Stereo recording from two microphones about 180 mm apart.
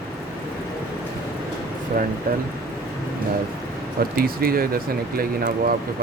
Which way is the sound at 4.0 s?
55° right (ahead or behind).